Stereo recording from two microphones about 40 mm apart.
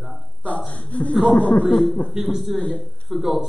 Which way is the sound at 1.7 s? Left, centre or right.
Centre.